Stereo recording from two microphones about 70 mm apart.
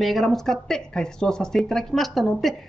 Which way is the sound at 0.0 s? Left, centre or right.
Centre.